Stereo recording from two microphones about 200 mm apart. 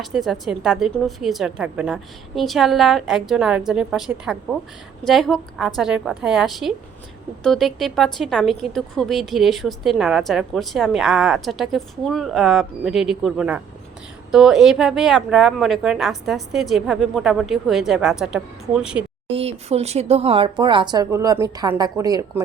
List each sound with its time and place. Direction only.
0.0 s speech: centre (ahead or behind)
19.3 s speech: 30° right (ahead or behind)